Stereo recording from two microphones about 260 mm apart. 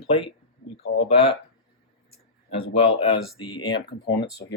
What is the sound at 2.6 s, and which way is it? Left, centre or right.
Speech, centre.